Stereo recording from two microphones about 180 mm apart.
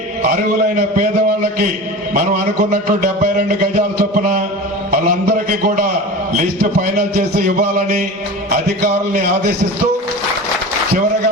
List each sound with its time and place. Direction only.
2.6 s speech: 50° right (ahead or behind)
7.3 s speech: 55° right (ahead or behind)